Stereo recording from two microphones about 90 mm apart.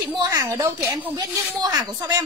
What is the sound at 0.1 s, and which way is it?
Speech, 45° right (ahead or behind).